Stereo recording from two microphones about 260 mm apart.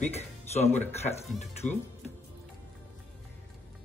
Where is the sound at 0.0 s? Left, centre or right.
Left.